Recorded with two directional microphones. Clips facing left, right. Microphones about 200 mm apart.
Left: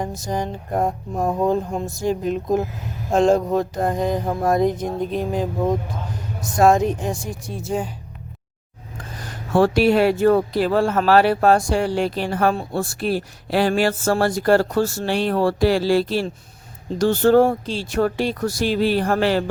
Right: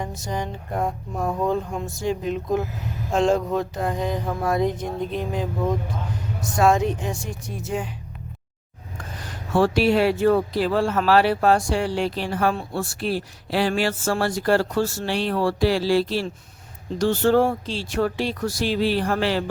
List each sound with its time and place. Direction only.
0.3 s speech: 40° left (ahead or behind)
6.6 s speech: 45° left (ahead or behind)
9.5 s speech: 50° left (ahead or behind)